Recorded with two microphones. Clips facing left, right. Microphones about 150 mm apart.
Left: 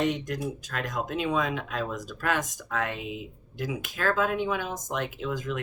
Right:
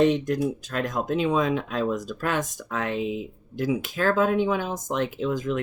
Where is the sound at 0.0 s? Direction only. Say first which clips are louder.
Right 7 dB; 30° right (ahead or behind).